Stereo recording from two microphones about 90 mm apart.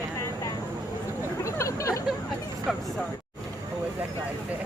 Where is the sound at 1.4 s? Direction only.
35° left (ahead or behind).